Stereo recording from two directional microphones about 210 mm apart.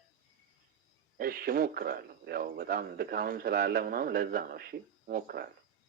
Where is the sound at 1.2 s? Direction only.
45° right (ahead or behind).